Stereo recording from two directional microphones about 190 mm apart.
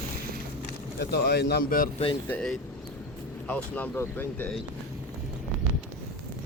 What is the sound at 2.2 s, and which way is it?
Speech, 5° left (ahead or behind).